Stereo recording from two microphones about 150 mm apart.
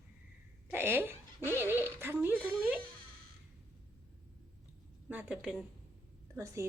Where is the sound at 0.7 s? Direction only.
15° right (ahead or behind).